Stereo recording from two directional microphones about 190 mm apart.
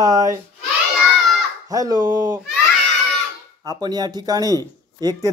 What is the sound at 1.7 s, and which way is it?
Speech, 20° right (ahead or behind).